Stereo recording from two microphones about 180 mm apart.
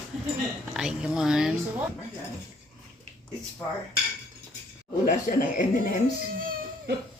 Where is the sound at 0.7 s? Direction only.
5° right (ahead or behind).